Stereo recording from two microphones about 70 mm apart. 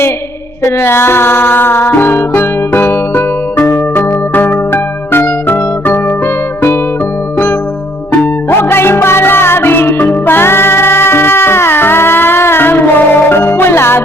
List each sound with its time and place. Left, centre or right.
0.8 s music: left
8.2 s music: left